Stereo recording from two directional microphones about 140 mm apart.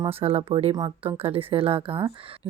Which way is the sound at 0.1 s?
45° right (ahead or behind).